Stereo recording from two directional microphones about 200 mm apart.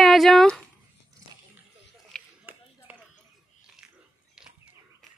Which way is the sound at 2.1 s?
5° right (ahead or behind).